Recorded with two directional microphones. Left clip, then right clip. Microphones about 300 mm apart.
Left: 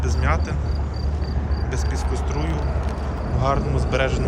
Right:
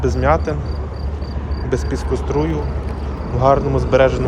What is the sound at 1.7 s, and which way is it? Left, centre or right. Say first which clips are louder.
Speech: right 10 dB; centre.